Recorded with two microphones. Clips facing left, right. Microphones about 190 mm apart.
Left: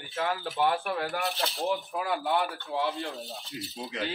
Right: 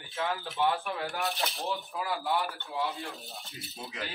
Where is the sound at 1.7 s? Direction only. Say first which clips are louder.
Left 4 dB; 55° left (ahead or behind).